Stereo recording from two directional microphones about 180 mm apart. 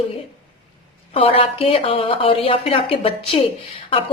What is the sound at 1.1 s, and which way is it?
A woman's voice, 30° left (ahead or behind).